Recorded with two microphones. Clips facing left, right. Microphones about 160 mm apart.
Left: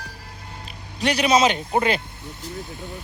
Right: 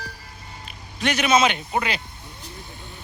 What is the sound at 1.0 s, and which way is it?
Speech, 35° left (ahead or behind).